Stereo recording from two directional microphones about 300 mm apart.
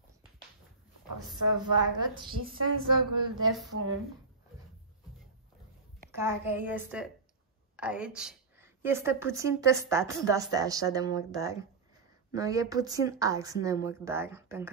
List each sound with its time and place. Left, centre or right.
1.4 s a woman's voice: right
2.3 s a sound: right
2.9 s speech: right
6.1 s a woman's voice: centre